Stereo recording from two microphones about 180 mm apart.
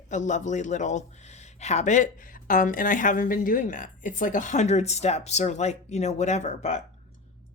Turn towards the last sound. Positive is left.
turn(degrees=40)  # may be behind; listen again after turning